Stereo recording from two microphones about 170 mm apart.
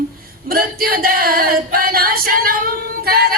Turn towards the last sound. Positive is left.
turn(degrees=-65)  # may be behind; listen again after turning